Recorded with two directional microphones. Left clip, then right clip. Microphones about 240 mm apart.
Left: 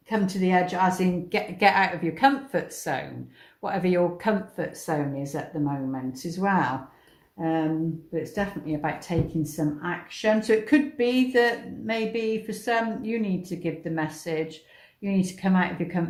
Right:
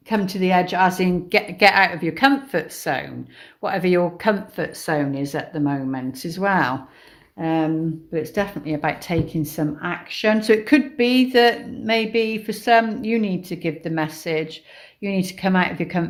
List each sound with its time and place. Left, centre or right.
0.1 s speech: right